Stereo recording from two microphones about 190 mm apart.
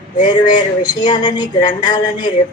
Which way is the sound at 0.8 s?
25° left (ahead or behind).